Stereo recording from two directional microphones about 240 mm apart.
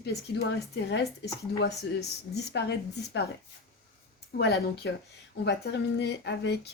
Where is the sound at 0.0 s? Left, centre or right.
Left.